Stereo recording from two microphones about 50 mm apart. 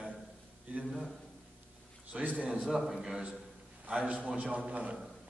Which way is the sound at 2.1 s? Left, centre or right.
Right.